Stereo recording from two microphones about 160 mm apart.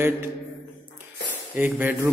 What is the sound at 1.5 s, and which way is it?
Speech, 10° right (ahead or behind).